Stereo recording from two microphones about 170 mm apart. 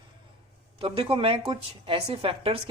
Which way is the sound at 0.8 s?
30° right (ahead or behind).